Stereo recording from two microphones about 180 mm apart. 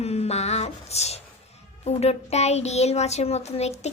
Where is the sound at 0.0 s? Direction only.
35° left (ahead or behind).